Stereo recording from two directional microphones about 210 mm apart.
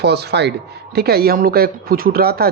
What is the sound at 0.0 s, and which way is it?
A man's voice, 50° right (ahead or behind).